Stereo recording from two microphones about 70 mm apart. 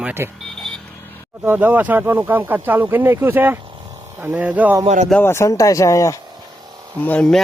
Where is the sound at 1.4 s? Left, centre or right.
Right.